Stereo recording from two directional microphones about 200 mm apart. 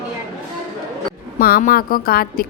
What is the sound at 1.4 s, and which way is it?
A woman's voice, 45° left (ahead or behind).